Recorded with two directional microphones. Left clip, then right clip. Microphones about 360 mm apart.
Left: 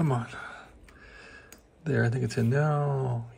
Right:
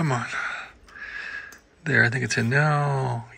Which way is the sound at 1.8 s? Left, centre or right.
Centre.